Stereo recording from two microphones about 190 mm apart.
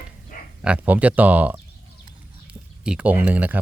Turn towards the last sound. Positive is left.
turn(degrees=-10)  # may be behind; listen again after turning